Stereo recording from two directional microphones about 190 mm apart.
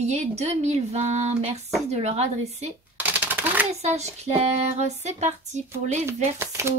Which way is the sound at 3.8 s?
35° right (ahead or behind).